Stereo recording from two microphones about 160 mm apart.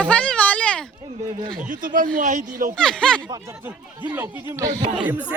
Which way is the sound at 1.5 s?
55° right (ahead or behind).